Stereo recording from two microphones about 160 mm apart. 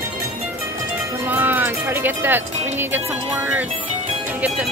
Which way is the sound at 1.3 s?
10° right (ahead or behind).